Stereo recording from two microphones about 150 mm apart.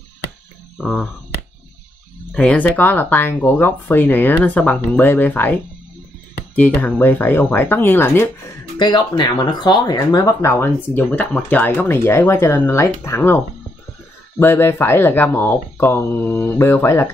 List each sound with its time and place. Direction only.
0.7 s speech: centre (ahead or behind)
2.3 s speech: 10° left (ahead or behind)
8.7 s speech: 30° left (ahead or behind)
14.4 s speech: 15° left (ahead or behind)